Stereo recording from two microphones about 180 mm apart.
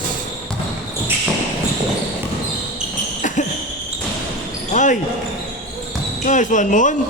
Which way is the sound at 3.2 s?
45° left (ahead or behind).